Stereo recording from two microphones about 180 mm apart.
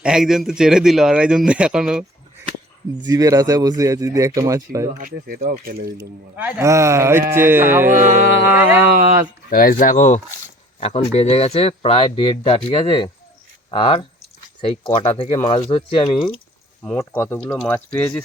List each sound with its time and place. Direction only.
0.0 s speech: 5° right (ahead or behind)
3.0 s speech: 20° right (ahead or behind)
4.9 s speech: 55° right (ahead or behind)
6.0 s speech: 10° right (ahead or behind)
7.9 s music: 45° right (ahead or behind)
8.4 s speech: 10° right (ahead or behind)
8.9 s music: 50° right (ahead or behind)
9.5 s speech: 50° left (ahead or behind); by 16.3 s 30° left (ahead or behind)
16.8 s speech: 10° left (ahead or behind)